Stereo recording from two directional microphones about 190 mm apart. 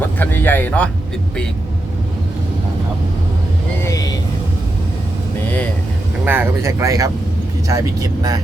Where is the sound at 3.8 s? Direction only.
20° left (ahead or behind).